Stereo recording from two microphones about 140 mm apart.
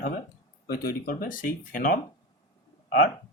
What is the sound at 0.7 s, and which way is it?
Speech, 90° left.